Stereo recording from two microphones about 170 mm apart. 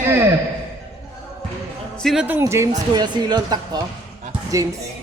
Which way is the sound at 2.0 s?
Centre (ahead or behind).